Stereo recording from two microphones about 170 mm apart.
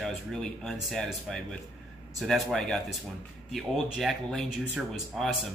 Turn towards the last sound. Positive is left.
turn(degrees=0)  # may be behind; listen again after turning